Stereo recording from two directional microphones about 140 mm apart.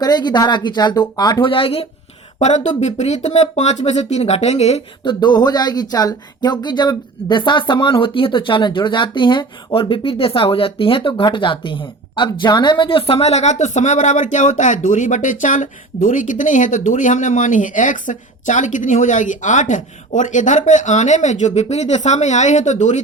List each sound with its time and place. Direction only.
0.0 s speech: 30° left (ahead or behind)
2.4 s speech: 55° left (ahead or behind)
5.0 s speech: 30° left (ahead or behind); by 23.0 s 60° left (ahead or behind)